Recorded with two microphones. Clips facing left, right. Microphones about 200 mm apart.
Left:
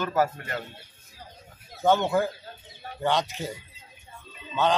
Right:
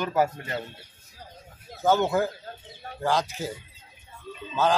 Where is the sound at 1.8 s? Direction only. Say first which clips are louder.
Even; 5° right (ahead or behind).